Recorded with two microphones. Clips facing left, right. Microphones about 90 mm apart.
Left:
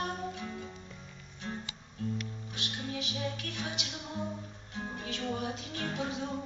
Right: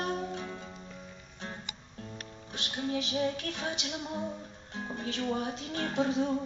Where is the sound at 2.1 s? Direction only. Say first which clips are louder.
Left 2 dB; 35° right (ahead or behind).